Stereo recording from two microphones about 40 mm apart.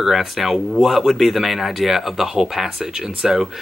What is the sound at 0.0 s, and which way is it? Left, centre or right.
Speech, centre.